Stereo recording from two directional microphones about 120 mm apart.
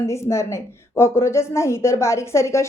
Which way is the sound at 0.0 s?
25° left (ahead or behind).